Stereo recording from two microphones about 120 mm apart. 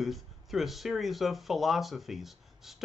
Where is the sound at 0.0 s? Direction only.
Centre (ahead or behind).